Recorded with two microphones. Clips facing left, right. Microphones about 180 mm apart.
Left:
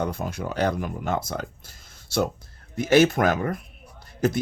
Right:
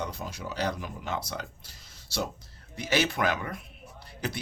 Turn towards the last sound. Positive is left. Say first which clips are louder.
# left 11 dB
turn(degrees=45)  # may be behind; listen again after turning